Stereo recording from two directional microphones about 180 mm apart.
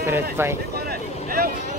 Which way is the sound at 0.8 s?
55° right (ahead or behind).